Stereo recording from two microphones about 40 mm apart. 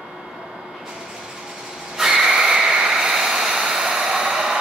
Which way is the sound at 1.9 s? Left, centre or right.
Centre.